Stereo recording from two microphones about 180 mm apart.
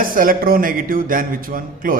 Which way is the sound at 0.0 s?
50° right (ahead or behind).